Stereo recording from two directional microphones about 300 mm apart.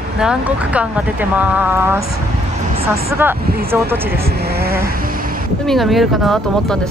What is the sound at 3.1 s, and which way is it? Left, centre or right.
Speech, centre.